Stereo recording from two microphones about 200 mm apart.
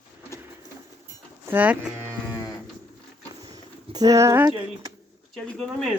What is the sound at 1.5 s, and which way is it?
Speech, 5° right (ahead or behind).